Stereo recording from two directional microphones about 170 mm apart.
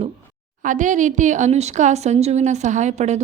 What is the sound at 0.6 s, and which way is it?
Speech, 50° right (ahead or behind).